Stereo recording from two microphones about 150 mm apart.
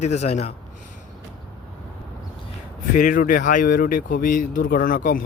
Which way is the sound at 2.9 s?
60° left (ahead or behind).